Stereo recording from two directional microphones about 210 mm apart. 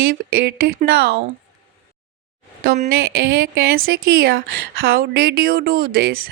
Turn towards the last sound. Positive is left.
turn(degrees=-45)  # may be behind; listen again after turning